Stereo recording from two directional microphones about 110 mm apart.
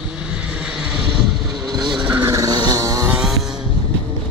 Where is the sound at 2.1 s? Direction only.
25° right (ahead or behind).